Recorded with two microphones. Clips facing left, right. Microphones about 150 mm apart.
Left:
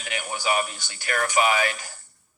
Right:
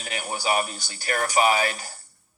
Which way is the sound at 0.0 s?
35° right (ahead or behind).